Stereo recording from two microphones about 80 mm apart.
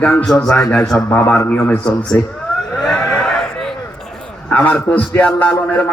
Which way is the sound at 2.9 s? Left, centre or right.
Centre.